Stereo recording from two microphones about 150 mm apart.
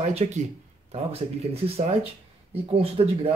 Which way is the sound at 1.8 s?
45° right (ahead or behind).